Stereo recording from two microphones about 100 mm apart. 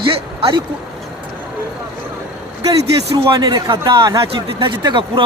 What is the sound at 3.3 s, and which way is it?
Speech, 45° right (ahead or behind).